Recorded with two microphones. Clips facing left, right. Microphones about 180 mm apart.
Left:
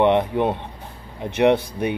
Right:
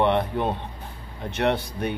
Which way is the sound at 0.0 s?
15° left (ahead or behind).